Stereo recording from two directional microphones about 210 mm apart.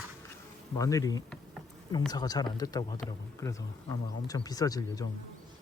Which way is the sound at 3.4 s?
15° left (ahead or behind).